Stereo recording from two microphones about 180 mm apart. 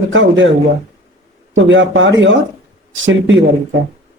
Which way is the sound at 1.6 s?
90° right.